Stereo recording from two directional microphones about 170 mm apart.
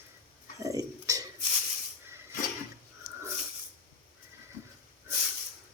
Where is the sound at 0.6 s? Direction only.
20° right (ahead or behind).